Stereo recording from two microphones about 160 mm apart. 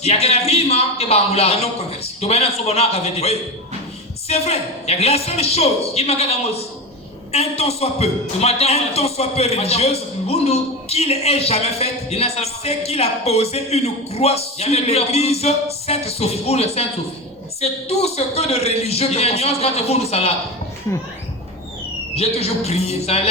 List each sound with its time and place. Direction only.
0.0 s a man's voice: 40° left (ahead or behind)
22.1 s a man's voice: 40° left (ahead or behind)